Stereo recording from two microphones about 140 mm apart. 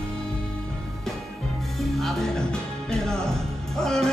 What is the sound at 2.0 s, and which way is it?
Music, 5° left (ahead or behind).